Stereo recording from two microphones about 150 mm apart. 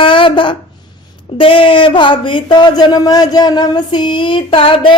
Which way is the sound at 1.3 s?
35° left (ahead or behind).